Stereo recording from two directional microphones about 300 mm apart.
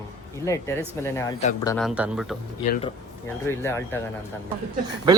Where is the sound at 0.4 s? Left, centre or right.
Centre.